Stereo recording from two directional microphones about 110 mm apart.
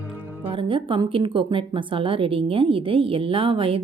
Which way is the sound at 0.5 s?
50° right (ahead or behind).